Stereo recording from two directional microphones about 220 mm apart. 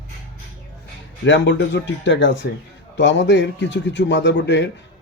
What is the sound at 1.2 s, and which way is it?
A man's voice, 55° left (ahead or behind).